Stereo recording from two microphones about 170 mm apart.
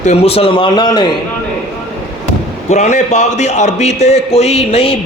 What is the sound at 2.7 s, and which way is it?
A man's voice, 45° left (ahead or behind).